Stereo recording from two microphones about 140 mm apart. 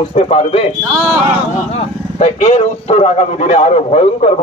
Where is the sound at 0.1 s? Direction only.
45° left (ahead or behind).